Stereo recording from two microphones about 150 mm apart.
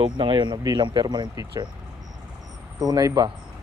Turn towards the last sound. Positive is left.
turn(degrees=-25)  # may be behind; listen again after turning